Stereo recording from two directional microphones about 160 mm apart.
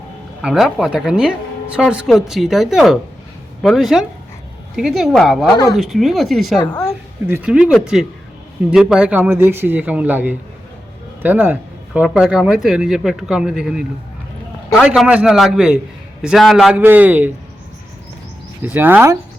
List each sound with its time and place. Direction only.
0.4 s speech: 5° right (ahead or behind)
16.8 s speech: 10° right (ahead or behind)
18.6 s speech: 10° right (ahead or behind)